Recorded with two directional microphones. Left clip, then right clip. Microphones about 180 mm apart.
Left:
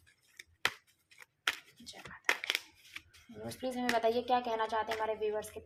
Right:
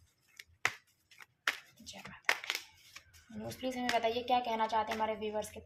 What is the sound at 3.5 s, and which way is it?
A woman's voice, 20° left (ahead or behind).